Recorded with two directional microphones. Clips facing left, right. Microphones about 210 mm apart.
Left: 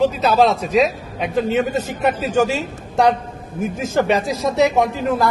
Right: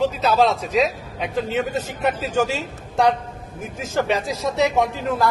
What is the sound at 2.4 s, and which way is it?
A woman's voice, 15° left (ahead or behind).